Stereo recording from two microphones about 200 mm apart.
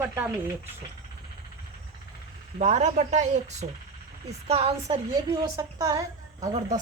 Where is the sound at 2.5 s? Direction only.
35° right (ahead or behind).